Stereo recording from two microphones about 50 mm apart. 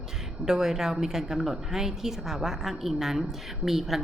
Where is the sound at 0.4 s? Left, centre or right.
Centre.